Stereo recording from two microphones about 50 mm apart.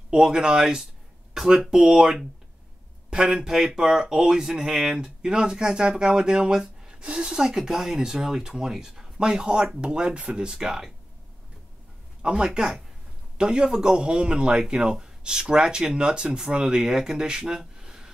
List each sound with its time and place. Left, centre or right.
0.1 s speech: centre
12.2 s speech: centre